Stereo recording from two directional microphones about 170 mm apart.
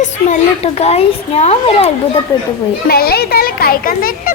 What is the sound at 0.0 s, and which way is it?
Speech, 40° left (ahead or behind).